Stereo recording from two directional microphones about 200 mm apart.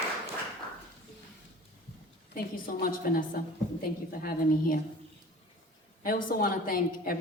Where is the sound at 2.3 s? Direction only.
45° left (ahead or behind).